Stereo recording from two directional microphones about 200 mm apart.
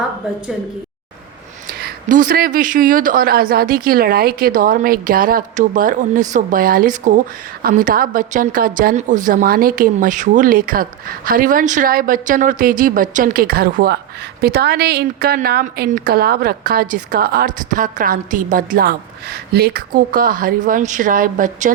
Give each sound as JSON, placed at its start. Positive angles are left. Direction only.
{"t": 1.8, "sound": "a woman's voice", "side_deg": -40}